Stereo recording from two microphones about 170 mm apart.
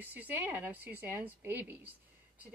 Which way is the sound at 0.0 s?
10° right (ahead or behind).